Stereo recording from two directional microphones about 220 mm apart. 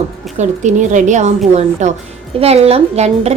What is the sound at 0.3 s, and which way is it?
A woman's voice, 35° right (ahead or behind).